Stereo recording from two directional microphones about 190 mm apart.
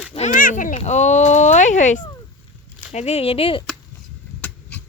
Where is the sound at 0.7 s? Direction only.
35° left (ahead or behind).